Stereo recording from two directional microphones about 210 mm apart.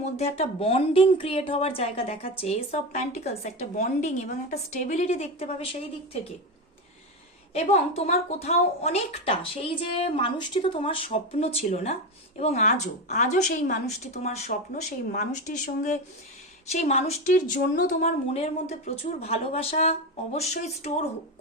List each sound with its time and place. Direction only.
0.0 s a woman's voice: 30° left (ahead or behind)
7.5 s a woman's voice: 30° left (ahead or behind)